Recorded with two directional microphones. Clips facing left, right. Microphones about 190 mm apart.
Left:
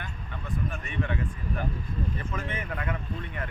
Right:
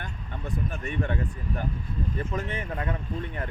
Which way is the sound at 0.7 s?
40° right (ahead or behind).